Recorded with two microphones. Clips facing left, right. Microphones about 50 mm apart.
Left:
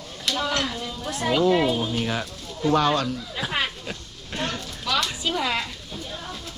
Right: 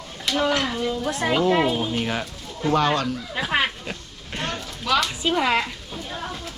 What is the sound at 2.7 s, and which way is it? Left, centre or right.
Speech, right.